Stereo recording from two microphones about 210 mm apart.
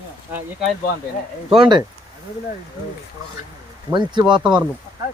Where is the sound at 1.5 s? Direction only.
25° right (ahead or behind).